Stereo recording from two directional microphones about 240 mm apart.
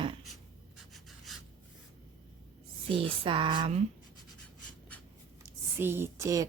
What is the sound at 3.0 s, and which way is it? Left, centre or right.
Speech, right.